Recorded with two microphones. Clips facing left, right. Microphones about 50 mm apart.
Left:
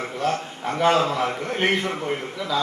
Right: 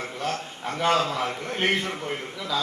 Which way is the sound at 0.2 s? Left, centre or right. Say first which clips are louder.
Left 6 dB; centre.